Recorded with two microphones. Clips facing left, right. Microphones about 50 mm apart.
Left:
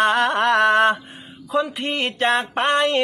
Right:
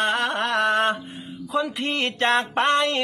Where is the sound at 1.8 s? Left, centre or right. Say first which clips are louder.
Left 1 dB; left.